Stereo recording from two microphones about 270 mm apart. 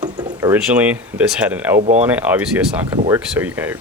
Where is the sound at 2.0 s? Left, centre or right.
Centre.